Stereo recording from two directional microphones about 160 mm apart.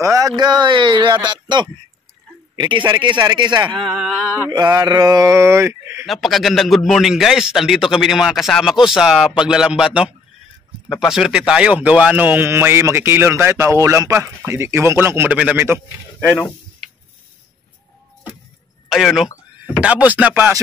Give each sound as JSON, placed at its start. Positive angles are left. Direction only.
{"t": 0.0, "sound": "a sound", "side_deg": -20}
{"t": 0.4, "sound": "speech", "side_deg": -25}
{"t": 3.8, "sound": "a man's voice", "side_deg": 0}
{"t": 4.5, "sound": "speech", "side_deg": -25}
{"t": 6.0, "sound": "a man's voice", "side_deg": 0}
{"t": 18.9, "sound": "a man's voice", "side_deg": 0}